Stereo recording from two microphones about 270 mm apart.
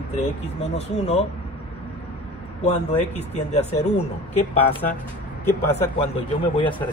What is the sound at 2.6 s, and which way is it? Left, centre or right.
Speech, left.